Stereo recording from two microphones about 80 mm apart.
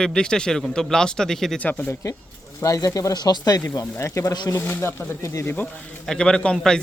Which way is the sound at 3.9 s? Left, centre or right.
Left.